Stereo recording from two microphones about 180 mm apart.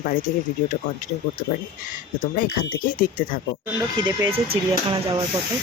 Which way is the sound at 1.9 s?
50° left (ahead or behind).